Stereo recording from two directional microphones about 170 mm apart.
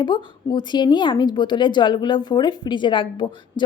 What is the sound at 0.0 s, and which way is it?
A woman's voice, 25° left (ahead or behind).